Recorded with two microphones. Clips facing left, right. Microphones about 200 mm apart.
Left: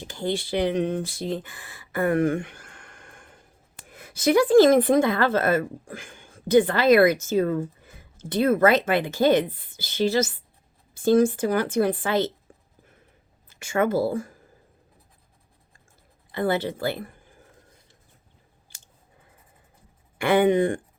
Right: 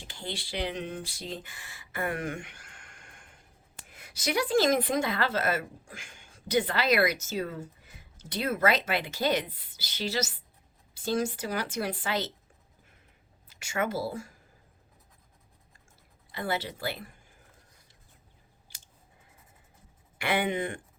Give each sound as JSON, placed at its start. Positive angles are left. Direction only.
{"t": 0.0, "sound": "a woman's voice", "side_deg": 50}
{"t": 13.5, "sound": "speech", "side_deg": 55}
{"t": 16.3, "sound": "a woman's voice", "side_deg": 55}
{"t": 20.1, "sound": "a woman's voice", "side_deg": 50}